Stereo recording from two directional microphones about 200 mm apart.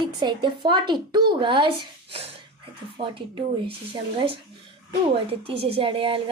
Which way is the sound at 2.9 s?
25° right (ahead or behind).